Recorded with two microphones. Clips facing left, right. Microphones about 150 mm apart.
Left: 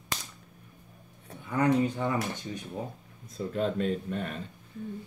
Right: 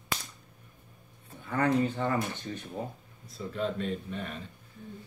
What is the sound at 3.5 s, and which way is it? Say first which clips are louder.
Speech: left 3 dB; 45° left (ahead or behind).